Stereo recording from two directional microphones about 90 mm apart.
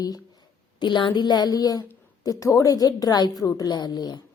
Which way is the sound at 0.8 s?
60° left (ahead or behind).